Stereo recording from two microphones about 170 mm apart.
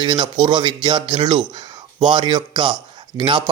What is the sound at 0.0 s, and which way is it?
A man's voice, 30° right (ahead or behind).